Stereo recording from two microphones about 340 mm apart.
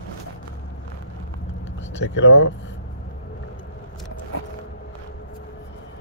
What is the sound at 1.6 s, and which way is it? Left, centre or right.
Vehicle, left.